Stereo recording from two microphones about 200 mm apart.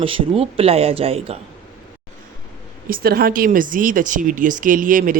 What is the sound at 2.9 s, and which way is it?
Speech, 50° right (ahead or behind).